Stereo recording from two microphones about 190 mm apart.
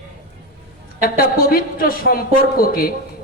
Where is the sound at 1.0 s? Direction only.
50° left (ahead or behind).